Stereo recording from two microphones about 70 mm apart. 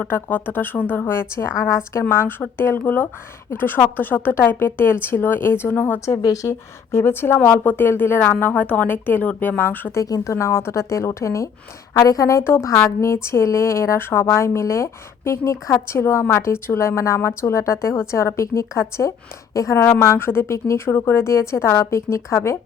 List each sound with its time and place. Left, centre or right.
0.1 s speech: left
6.2 s speech: left
9.9 s a woman's voice: left
11.9 s a woman's voice: left
19.7 s speech: left